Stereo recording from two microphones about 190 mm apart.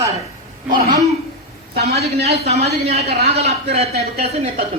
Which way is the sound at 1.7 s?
55° right (ahead or behind).